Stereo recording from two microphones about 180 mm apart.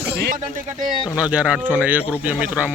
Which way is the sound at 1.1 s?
5° right (ahead or behind).